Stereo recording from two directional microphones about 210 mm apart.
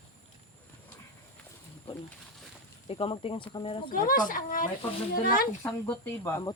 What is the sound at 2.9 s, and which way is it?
Speech, 25° left (ahead or behind).